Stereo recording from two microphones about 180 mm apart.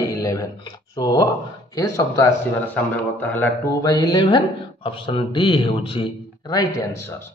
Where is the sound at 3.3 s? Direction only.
15° left (ahead or behind).